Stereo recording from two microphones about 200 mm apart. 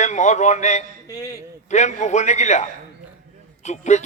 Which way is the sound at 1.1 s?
20° left (ahead or behind).